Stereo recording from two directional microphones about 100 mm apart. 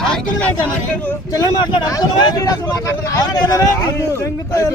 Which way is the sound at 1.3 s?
40° left (ahead or behind).